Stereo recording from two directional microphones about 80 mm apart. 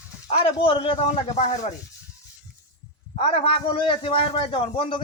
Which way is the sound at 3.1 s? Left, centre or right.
Left.